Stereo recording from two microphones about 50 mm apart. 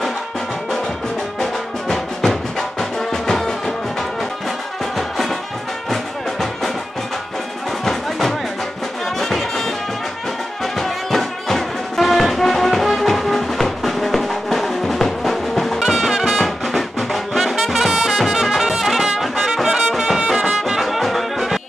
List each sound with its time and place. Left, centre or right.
1.4 s music: centre
4.9 s music: centre
7.8 s music: centre
15.8 s brass instrument: centre